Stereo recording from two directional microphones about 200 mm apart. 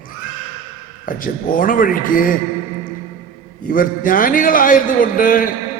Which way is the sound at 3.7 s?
45° left (ahead or behind).